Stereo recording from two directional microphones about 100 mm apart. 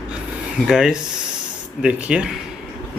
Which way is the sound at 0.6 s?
5° right (ahead or behind).